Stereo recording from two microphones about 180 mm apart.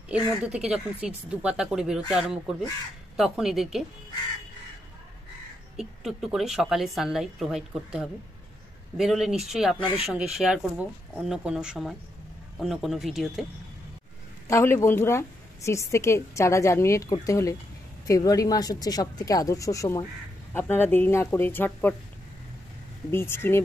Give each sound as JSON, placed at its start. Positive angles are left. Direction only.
{"t": 0.5, "sound": "a woman's voice", "side_deg": -5}
{"t": 5.8, "sound": "a woman's voice", "side_deg": 0}
{"t": 9.8, "sound": "speech", "side_deg": 25}
{"t": 10.1, "sound": "a woman's voice", "side_deg": 0}
{"t": 14.5, "sound": "a woman's voice", "side_deg": 15}
{"t": 23.1, "sound": "a woman's voice", "side_deg": 15}